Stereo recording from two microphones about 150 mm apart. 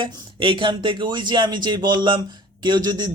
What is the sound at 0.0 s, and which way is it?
A man's voice, 35° right (ahead or behind).